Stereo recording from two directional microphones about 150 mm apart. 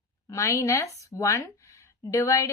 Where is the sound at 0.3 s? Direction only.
20° left (ahead or behind).